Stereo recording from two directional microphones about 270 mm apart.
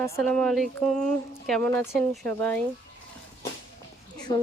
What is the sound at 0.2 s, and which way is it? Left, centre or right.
Speech, centre.